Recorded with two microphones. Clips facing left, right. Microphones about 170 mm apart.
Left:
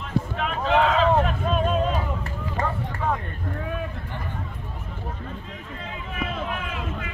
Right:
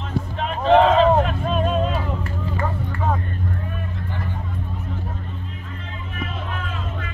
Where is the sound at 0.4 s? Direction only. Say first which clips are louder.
Right 7 dB; 35° right (ahead or behind).